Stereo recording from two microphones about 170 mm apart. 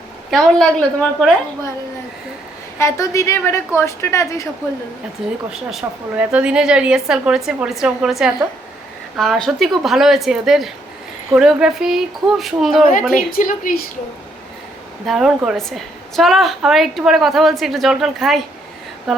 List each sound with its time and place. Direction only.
0.3 s a woman's voice: centre (ahead or behind)
2.7 s a woman's voice: 15° left (ahead or behind)
5.5 s a woman's voice: 5° right (ahead or behind)
13.1 s a woman's voice: 55° left (ahead or behind)
15.0 s a woman's voice: centre (ahead or behind)